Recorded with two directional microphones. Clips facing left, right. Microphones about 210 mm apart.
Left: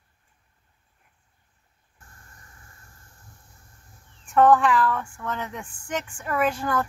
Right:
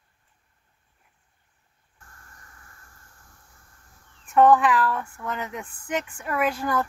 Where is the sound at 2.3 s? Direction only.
20° left (ahead or behind).